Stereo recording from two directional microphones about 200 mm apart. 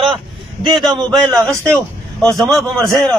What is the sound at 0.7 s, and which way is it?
A man's voice, centre (ahead or behind).